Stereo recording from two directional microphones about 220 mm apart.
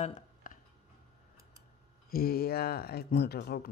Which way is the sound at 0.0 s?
35° left (ahead or behind).